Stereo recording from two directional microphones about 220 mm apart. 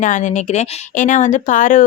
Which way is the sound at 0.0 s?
35° left (ahead or behind).